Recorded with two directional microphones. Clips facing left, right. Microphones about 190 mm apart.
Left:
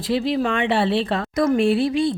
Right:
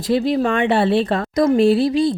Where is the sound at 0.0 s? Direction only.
45° right (ahead or behind).